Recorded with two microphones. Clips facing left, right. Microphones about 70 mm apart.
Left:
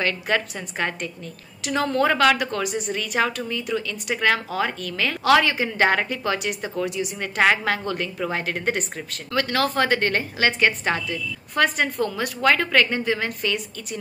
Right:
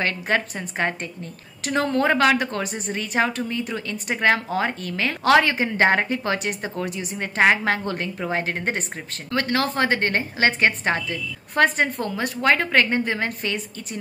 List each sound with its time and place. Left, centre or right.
0.0 s a woman's voice: right